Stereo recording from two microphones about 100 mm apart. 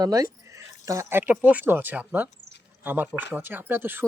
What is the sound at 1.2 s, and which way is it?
Speech, 20° right (ahead or behind).